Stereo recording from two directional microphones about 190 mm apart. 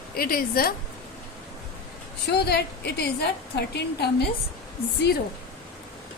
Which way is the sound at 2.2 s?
60° left (ahead or behind).